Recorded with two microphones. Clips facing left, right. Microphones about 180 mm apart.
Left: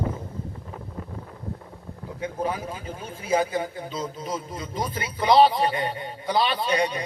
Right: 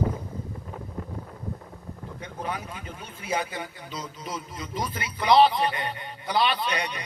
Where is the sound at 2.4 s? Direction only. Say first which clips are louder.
Left 4 dB; 35° left (ahead or behind).